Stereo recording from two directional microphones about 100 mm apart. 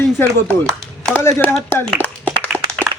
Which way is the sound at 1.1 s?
20° left (ahead or behind).